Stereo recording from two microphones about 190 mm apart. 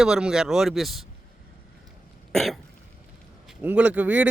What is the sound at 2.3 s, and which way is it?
Cough, centre (ahead or behind).